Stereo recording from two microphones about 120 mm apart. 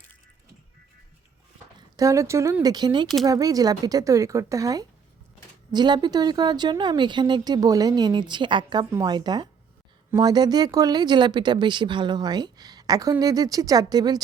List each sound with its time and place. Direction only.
2.0 s speech: 25° right (ahead or behind)